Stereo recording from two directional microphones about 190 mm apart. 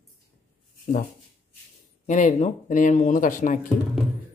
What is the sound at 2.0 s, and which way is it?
Speech, 40° left (ahead or behind).